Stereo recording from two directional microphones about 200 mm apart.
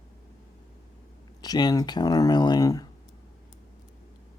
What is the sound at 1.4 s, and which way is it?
Speech, 20° left (ahead or behind).